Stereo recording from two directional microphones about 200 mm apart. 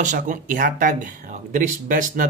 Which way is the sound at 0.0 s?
40° right (ahead or behind).